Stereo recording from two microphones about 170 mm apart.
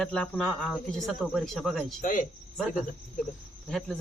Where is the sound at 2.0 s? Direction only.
50° left (ahead or behind).